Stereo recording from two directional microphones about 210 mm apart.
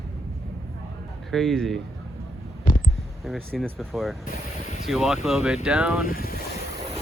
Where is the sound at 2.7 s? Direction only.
40° left (ahead or behind).